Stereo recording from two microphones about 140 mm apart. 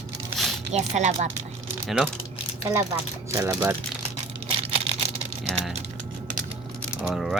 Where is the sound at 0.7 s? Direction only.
55° right (ahead or behind).